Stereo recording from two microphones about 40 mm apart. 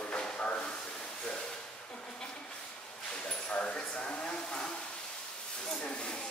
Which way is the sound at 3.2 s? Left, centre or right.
Left.